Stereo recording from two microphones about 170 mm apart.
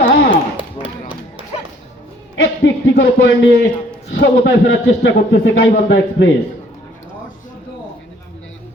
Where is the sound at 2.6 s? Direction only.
90° left.